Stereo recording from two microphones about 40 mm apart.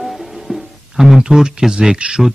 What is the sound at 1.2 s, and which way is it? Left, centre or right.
Speech, centre.